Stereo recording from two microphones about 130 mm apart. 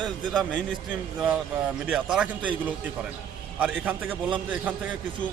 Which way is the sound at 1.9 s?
5° right (ahead or behind).